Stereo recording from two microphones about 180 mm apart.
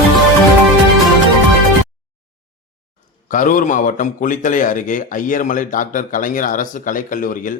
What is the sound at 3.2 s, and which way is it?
A man's voice, 50° left (ahead or behind).